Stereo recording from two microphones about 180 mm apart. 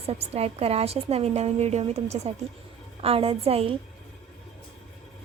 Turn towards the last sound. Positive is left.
turn(degrees=-35)  # may be behind; listen again after turning